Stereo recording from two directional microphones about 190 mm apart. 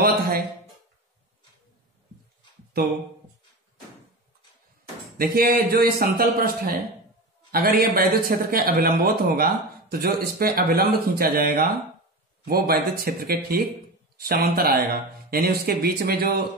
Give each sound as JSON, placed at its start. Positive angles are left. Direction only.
{"t": 5.1, "sound": "speech", "side_deg": -50}